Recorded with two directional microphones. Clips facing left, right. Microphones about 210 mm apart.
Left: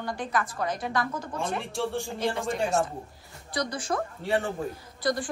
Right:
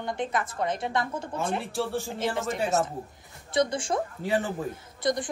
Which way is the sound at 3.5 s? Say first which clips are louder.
Right 4 dB; 25° right (ahead or behind).